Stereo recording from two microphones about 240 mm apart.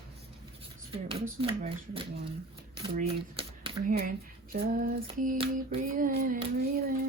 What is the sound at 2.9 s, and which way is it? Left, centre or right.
Typewriter, right.